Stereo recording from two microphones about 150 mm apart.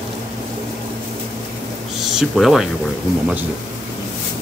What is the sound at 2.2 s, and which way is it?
Speech, centre (ahead or behind).